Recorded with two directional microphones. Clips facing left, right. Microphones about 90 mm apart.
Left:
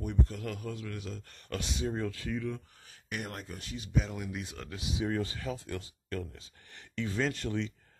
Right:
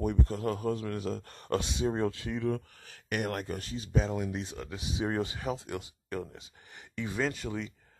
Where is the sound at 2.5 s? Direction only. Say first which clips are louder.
Right 7 dB; 70° right (ahead or behind).